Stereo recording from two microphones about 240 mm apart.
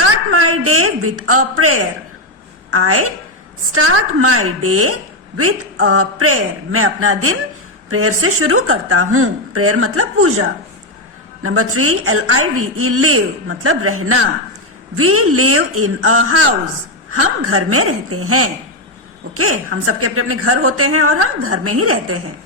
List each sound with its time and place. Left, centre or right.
0.3 s a man's voice: right
11.4 s a woman's voice: right